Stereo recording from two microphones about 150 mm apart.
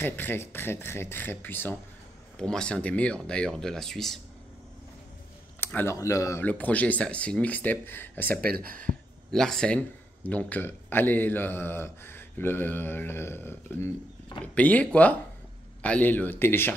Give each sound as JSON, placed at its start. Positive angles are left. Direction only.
{"t": 0.0, "sound": "speech", "side_deg": 15}
{"t": 5.6, "sound": "speech", "side_deg": 15}
{"t": 6.4, "sound": "speech", "side_deg": 10}
{"t": 8.3, "sound": "speech", "side_deg": -90}
{"t": 8.8, "sound": "speech", "side_deg": 5}